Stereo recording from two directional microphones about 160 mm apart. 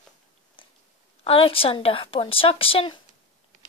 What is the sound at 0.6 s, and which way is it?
Biting, 30° left (ahead or behind).